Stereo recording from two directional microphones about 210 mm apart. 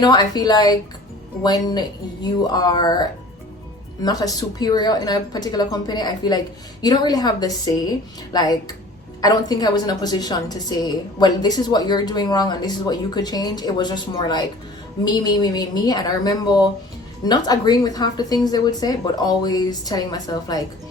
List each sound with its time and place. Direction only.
0.0 s a woman's voice: 20° left (ahead or behind)
2.5 s a woman's voice: 20° left (ahead or behind)